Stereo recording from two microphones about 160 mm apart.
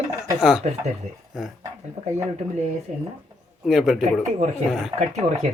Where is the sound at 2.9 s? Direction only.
45° right (ahead or behind).